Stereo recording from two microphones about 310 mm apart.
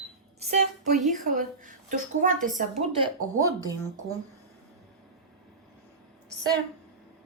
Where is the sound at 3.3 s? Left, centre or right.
Centre.